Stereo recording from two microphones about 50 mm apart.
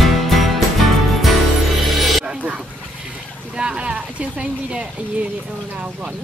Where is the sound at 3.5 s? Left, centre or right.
Centre.